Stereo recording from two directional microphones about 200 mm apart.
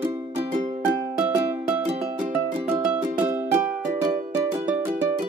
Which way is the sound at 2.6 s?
10° right (ahead or behind).